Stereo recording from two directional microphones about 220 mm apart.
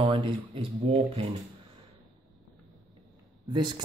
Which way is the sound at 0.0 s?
20° right (ahead or behind).